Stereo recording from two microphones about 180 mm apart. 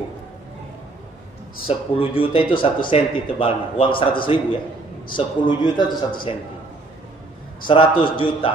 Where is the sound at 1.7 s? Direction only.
30° left (ahead or behind).